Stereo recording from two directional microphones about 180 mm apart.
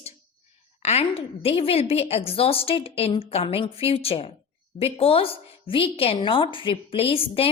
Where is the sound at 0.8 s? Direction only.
35° left (ahead or behind).